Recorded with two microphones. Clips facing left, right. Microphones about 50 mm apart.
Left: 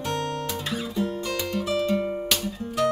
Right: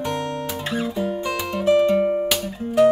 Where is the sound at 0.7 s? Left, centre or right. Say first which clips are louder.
Right 5 dB; right.